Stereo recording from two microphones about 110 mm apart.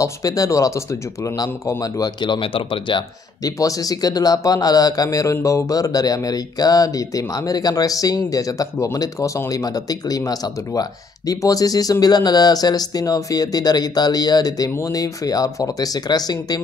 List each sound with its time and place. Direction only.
0.0 s speech: 35° left (ahead or behind); by 3.0 s 55° left (ahead or behind)
3.4 s speech: 30° left (ahead or behind)